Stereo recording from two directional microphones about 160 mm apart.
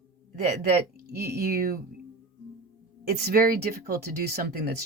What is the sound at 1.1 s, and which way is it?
Speech, 75° right (ahead or behind).